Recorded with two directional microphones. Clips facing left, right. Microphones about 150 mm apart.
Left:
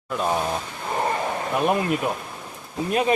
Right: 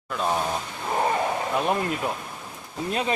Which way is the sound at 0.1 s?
5° left (ahead or behind).